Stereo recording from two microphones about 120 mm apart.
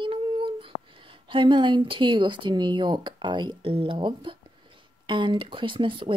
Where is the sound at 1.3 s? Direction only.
45° right (ahead or behind).